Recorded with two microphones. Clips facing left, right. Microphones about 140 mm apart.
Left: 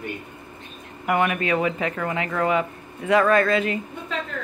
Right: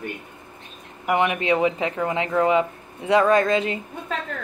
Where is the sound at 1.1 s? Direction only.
20° right (ahead or behind).